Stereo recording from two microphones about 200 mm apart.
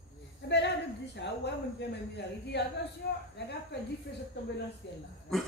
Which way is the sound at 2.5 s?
55° left (ahead or behind).